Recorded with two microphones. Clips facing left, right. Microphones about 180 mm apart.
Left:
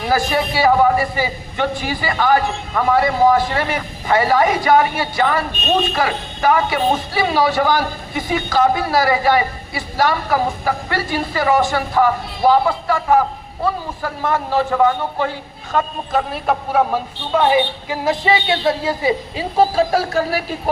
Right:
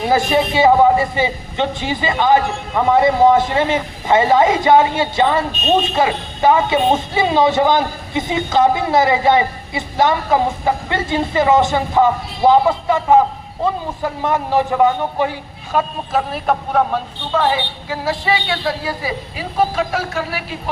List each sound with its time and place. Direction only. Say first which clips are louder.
0.0 s a man's voice: right 3 dB; 20° right (ahead or behind)
16.1 s a man's voice: right 1 dB; centre (ahead or behind); by 20.6 s 40° left (ahead or behind)